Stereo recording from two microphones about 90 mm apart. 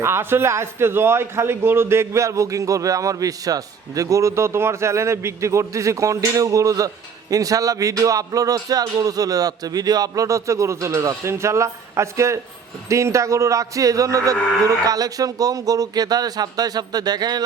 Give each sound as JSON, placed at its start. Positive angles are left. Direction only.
{"t": 0.0, "sound": "a man's voice", "side_deg": -25}